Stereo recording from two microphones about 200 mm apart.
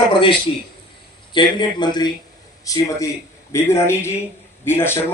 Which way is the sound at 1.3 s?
25° left (ahead or behind).